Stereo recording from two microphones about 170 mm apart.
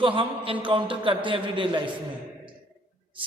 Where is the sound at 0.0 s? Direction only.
30° right (ahead or behind).